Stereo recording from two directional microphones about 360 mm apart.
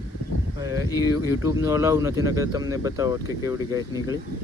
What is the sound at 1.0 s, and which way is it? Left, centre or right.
Speech, left.